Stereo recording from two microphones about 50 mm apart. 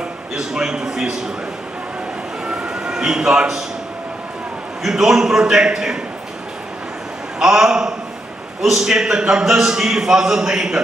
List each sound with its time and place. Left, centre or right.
0.3 s a man's voice: centre
2.4 s a sound: centre
4.8 s a man's voice: centre
7.3 s a man's voice: centre